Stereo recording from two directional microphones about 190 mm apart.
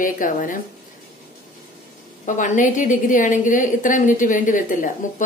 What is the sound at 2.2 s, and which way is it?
A woman's voice, 40° left (ahead or behind).